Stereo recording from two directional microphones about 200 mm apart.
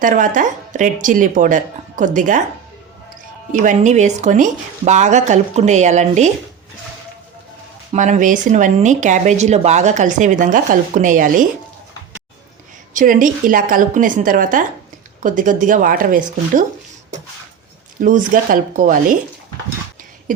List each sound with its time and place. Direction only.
0.0 s speech: 40° right (ahead or behind)
3.5 s speech: 40° right (ahead or behind)
7.9 s speech: 40° right (ahead or behind)
12.9 s speech: 40° right (ahead or behind)
18.0 s speech: 40° right (ahead or behind)